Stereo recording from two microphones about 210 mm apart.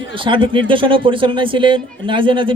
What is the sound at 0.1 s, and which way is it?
A man's voice, 25° right (ahead or behind).